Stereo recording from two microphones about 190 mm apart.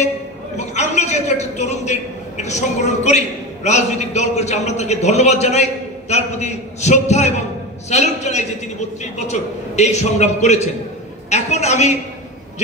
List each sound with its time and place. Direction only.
0.6 s a man's voice: 35° left (ahead or behind)